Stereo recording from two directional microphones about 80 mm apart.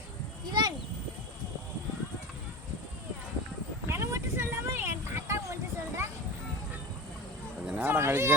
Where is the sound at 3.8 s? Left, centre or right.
Right.